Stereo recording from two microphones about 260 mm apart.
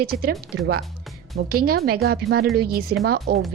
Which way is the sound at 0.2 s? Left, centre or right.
Right.